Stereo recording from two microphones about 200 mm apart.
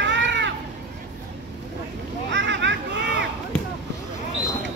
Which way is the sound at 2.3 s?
65° right (ahead or behind).